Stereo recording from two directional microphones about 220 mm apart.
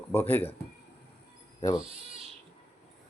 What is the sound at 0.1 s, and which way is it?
Speech, 10° left (ahead or behind).